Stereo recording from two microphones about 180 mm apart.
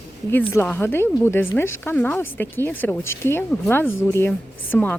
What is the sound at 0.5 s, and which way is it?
Speech, 10° left (ahead or behind).